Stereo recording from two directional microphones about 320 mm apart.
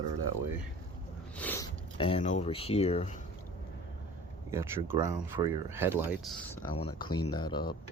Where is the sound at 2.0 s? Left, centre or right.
Centre.